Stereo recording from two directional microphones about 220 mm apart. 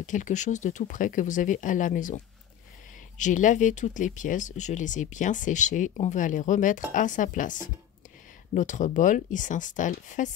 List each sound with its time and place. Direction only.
0.0 s speech: 35° left (ahead or behind)